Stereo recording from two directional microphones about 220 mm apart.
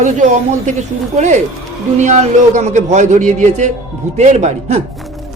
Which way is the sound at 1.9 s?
30° right (ahead or behind).